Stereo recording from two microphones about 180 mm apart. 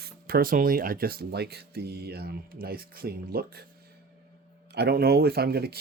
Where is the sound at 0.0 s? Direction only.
55° right (ahead or behind).